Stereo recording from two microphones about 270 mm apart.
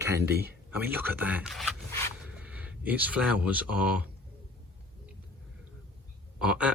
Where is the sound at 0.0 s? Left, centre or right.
Centre.